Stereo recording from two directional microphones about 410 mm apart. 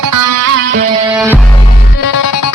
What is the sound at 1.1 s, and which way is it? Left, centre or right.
Music, centre.